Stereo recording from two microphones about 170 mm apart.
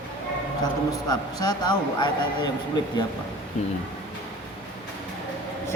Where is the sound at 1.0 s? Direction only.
25° left (ahead or behind).